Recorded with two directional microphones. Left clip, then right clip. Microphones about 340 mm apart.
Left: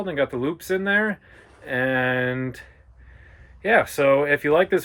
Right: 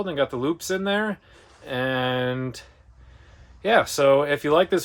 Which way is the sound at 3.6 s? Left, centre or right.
Centre.